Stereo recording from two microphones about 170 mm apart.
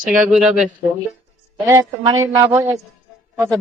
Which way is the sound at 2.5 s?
10° right (ahead or behind).